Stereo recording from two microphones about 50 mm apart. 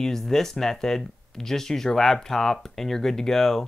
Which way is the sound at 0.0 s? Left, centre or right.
Centre.